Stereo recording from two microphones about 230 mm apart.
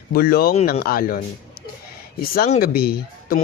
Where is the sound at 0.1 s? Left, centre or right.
Left.